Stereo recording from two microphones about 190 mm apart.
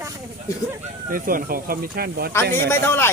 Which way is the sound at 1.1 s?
50° right (ahead or behind).